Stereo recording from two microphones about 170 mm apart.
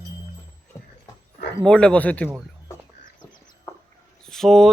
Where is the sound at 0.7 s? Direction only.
15° left (ahead or behind).